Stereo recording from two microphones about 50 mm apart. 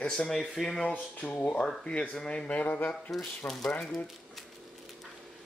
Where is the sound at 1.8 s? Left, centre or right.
Left.